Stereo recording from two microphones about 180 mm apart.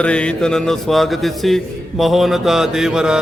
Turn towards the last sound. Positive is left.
turn(degrees=-5)  # may be behind; listen again after turning